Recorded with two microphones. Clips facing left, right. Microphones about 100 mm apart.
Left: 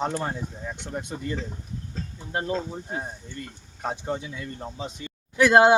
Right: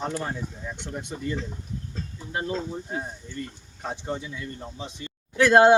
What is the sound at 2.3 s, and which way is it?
Speech, 30° left (ahead or behind).